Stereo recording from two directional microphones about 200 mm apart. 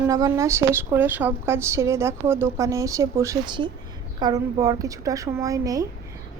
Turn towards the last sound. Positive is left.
turn(degrees=-15)  # may be behind; listen again after turning